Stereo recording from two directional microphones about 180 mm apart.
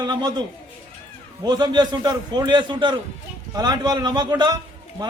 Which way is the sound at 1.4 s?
25° right (ahead or behind).